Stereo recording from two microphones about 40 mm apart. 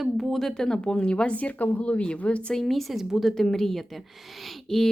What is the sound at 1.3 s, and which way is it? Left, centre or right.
A woman's voice, left.